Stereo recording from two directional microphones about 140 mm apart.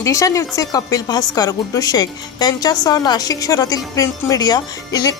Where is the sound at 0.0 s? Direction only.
25° left (ahead or behind).